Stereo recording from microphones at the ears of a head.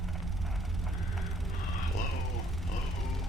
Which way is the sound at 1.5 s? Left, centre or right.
Left.